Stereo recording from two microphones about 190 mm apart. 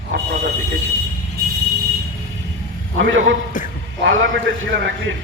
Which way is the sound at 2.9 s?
90° right.